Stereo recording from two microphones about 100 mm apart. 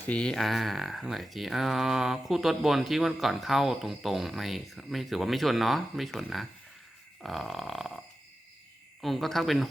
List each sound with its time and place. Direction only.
0.1 s speech: 10° left (ahead or behind)